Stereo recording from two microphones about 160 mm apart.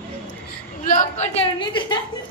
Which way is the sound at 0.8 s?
50° left (ahead or behind).